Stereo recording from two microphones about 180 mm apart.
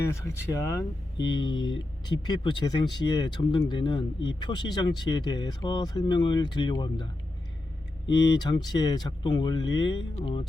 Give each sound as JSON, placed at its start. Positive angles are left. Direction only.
{"t": 0.0, "sound": "speech", "side_deg": 15}